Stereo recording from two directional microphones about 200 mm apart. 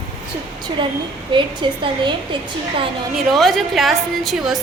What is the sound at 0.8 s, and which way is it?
A woman's voice, 25° right (ahead or behind).